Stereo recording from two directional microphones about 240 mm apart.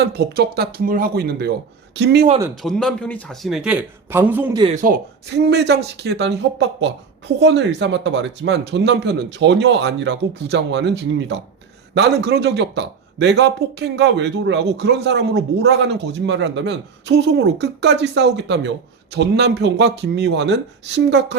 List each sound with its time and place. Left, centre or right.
0.2 s speech: right
2.6 s a man's voice: centre
4.6 s speech: right
5.4 s speech: right